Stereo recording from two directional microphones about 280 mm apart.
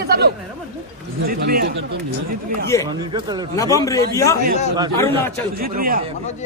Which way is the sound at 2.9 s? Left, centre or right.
Centre.